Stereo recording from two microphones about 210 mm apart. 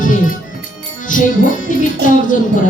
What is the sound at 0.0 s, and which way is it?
Music, 40° left (ahead or behind).